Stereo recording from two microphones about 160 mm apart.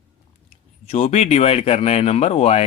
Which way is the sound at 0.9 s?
40° left (ahead or behind).